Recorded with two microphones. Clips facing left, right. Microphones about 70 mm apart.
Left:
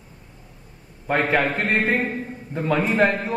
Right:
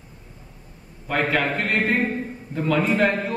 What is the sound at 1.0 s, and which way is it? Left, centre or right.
A man's voice, left.